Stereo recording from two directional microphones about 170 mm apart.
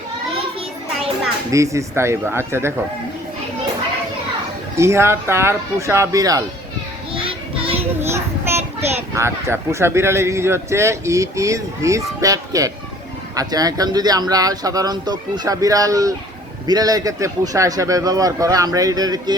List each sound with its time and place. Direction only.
1.5 s speech: 20° right (ahead or behind)
4.8 s speech: 15° right (ahead or behind)
7.2 s child singing: 35° right (ahead or behind)
8.1 s a child's voice: 15° right (ahead or behind)